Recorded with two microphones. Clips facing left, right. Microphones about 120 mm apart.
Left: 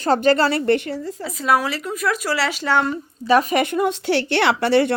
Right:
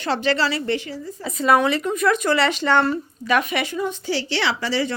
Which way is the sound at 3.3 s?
35° left (ahead or behind).